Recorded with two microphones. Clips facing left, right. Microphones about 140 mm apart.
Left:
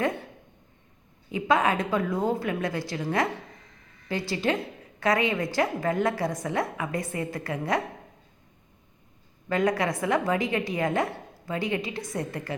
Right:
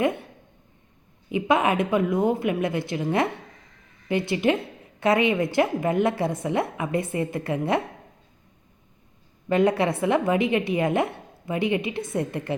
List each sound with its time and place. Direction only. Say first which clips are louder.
1.3 s a woman's voice: right 2 dB; 20° right (ahead or behind)
9.5 s a woman's voice: right 4 dB; 25° right (ahead or behind)